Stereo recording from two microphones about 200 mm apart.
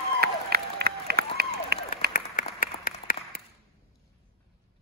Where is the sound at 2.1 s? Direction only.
45° left (ahead or behind).